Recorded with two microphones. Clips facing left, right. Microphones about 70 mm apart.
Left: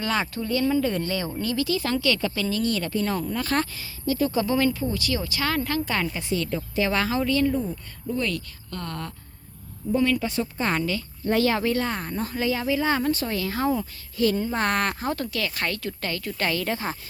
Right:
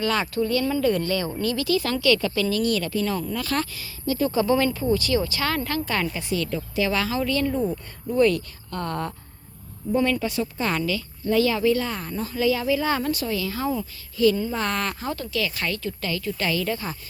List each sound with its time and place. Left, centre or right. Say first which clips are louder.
0.0 s speech: right 3 dB; left
4.0 s speech: right 1 dB; centre; by 7.2 s left
7.2 s speech: left 1 dB; left
8.1 s speech: right 8 dB; centre
8.7 s speech: right 5 dB; right
10.2 s speech: even; left
11.3 s speech: right 2 dB; left
11.9 s speech: left 1 dB; left
13.1 s speech: left 1 dB; left
13.3 s speech: left 1 dB; left
15.4 s speech: right 1 dB; left
16.7 s speech: left 2 dB; left